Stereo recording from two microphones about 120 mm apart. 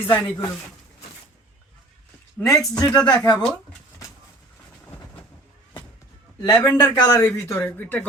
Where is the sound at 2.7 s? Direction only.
35° left (ahead or behind).